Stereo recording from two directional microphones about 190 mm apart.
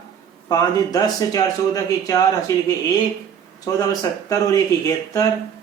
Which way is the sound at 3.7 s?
20° left (ahead or behind).